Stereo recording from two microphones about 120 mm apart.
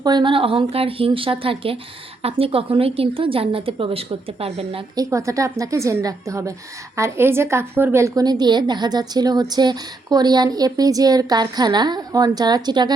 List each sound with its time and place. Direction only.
0.0 s a woman's voice: 35° right (ahead or behind); by 4.8 s 55° right (ahead or behind)
4.9 s a woman's voice: 25° right (ahead or behind)